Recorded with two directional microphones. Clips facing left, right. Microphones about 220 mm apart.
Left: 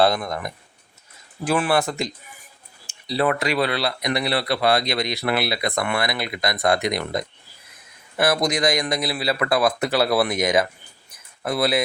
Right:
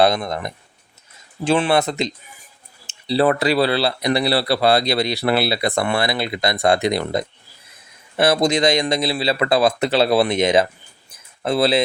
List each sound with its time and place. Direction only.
0.0 s speech: 20° right (ahead or behind)